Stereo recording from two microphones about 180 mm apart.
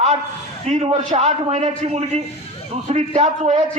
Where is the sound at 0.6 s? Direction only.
40° right (ahead or behind).